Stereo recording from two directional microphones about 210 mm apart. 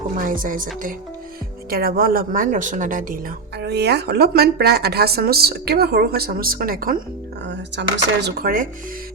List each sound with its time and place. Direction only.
0.2 s music: 40° right (ahead or behind)
1.7 s speech: 45° right (ahead or behind)
7.4 s speech: 55° right (ahead or behind)